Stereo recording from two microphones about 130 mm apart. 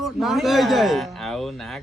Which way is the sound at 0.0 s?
Centre (ahead or behind).